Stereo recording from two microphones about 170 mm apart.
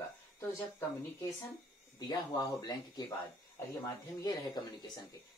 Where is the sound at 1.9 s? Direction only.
25° left (ahead or behind).